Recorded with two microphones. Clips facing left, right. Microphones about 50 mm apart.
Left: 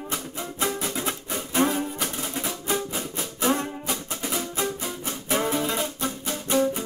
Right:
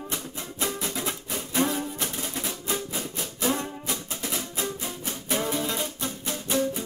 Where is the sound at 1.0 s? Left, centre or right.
Left.